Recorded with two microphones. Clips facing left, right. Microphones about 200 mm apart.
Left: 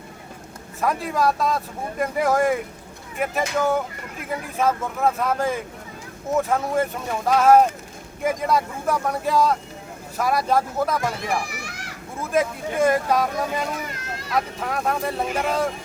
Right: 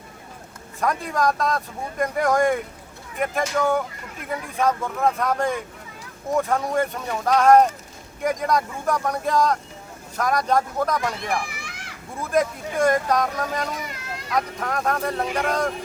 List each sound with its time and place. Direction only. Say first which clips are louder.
0.8 s speech: left 1 dB; 5° left (ahead or behind)
11.4 s children playing: left 3 dB; 40° left (ahead or behind)
12.2 s speech: even; 5° left (ahead or behind)